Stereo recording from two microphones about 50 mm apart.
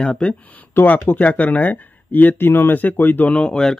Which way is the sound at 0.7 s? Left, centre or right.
Left.